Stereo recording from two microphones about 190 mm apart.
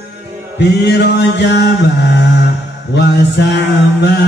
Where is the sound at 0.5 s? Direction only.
65° left (ahead or behind).